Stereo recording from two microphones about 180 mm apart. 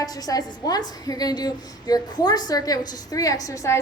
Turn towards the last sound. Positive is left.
turn(degrees=15)  # may be behind; listen again after turning